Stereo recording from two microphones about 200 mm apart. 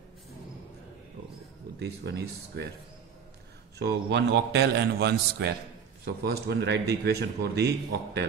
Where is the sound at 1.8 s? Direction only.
55° right (ahead or behind).